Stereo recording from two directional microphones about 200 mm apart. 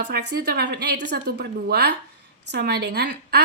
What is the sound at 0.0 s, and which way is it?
A woman's voice, 55° right (ahead or behind).